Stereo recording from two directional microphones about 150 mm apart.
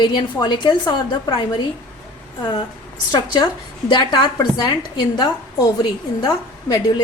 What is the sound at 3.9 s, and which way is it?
A woman's voice, 30° left (ahead or behind).